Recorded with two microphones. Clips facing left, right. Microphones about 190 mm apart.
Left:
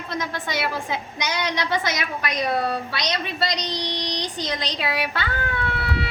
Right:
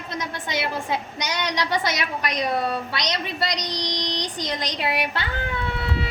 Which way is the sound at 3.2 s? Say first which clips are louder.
Left 1 dB; 15° right (ahead or behind).